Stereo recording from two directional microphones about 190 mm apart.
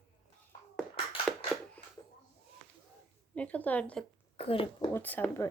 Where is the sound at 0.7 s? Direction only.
5° left (ahead or behind).